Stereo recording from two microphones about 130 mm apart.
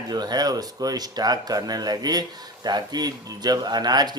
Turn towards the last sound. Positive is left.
turn(degrees=-35)  # may be behind; listen again after turning